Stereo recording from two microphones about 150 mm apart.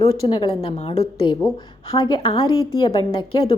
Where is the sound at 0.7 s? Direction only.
45° left (ahead or behind).